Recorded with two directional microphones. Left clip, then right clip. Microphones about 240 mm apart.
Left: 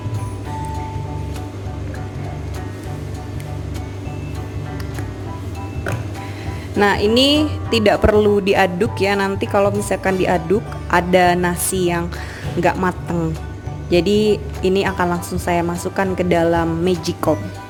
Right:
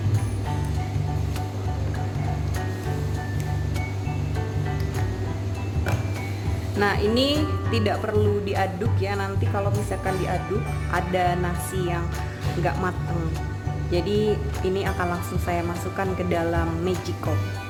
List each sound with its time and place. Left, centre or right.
6.7 s speech: left
13.9 s speech: left